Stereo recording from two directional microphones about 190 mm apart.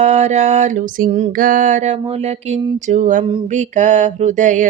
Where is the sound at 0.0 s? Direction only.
35° right (ahead or behind).